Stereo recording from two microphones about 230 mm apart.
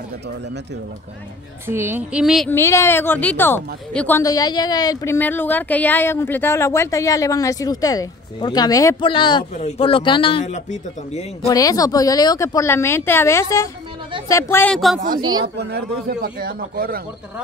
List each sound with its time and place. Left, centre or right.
1.7 s a woman's voice: centre
2.5 s a woman's voice: centre; by 11.2 s left
11.4 s a woman's voice: centre
15.1 s a man's voice: centre
15.4 s speech: right